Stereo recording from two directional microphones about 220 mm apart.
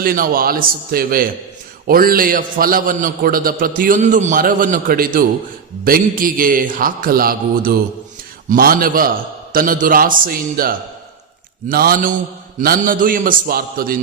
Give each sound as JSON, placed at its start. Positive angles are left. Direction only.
{"t": 0.0, "sound": "a man's voice", "side_deg": -40}